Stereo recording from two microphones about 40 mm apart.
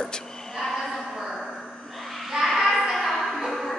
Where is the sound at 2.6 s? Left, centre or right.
Centre.